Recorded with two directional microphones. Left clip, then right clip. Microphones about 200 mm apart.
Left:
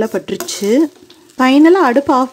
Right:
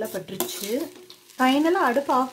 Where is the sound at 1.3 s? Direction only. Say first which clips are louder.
Left 11 dB; 35° left (ahead or behind).